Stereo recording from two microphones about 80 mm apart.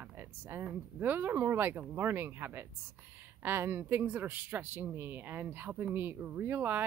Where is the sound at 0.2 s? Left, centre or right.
Right.